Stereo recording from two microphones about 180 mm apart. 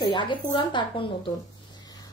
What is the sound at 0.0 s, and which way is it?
A child's voice, 25° left (ahead or behind).